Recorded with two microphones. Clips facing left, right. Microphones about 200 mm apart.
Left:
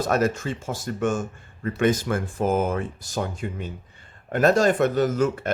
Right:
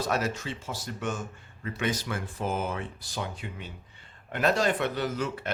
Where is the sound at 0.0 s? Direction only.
50° left (ahead or behind).